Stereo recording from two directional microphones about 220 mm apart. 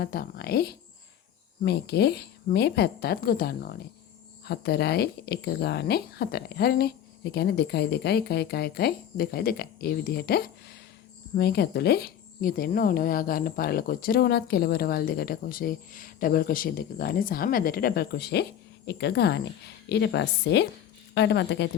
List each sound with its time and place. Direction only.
0.0 s a woman's voice: 45° left (ahead or behind)